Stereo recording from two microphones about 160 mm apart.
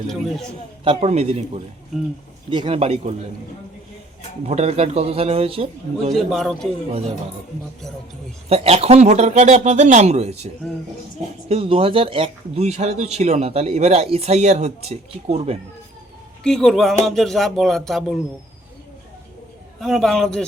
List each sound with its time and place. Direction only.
0.1 s music: centre (ahead or behind)
0.9 s speech: 35° right (ahead or behind)
4.4 s speech: 40° right (ahead or behind)
6.1 s music: centre (ahead or behind)
8.4 s speech: 40° right (ahead or behind)
16.4 s music: centre (ahead or behind)
19.8 s music: centre (ahead or behind)